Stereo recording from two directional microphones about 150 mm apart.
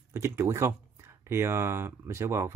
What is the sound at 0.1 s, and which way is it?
Speech, 20° right (ahead or behind).